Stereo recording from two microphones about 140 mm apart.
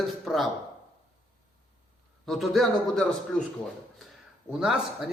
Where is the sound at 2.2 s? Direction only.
Centre (ahead or behind).